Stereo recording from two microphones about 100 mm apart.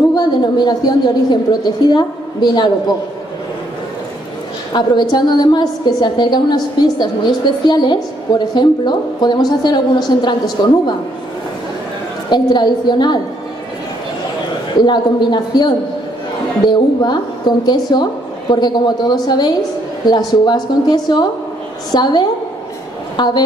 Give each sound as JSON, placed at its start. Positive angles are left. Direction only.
{"t": 0.1, "sound": "a woman's voice", "side_deg": 45}
{"t": 4.7, "sound": "a woman's voice", "side_deg": 45}
{"t": 12.3, "sound": "a woman's voice", "side_deg": 45}
{"t": 14.8, "sound": "a woman's voice", "side_deg": 50}